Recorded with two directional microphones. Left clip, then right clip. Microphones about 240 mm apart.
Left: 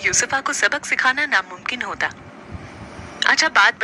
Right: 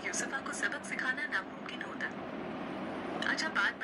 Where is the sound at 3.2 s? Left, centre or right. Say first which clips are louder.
Left 18 dB; left.